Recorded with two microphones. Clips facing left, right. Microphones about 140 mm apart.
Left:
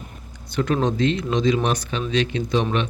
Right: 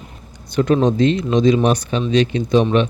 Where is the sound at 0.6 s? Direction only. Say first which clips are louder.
Right 6 dB; 30° right (ahead or behind).